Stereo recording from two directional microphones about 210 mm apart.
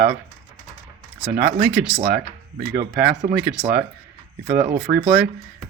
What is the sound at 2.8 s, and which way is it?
Speech, 45° right (ahead or behind).